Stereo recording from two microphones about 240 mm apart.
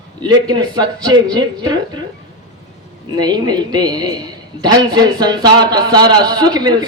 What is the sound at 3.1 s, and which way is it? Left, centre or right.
A man's voice, centre.